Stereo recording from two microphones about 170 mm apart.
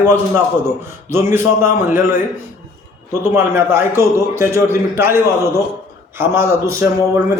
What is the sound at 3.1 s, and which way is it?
A man's voice, 15° right (ahead or behind).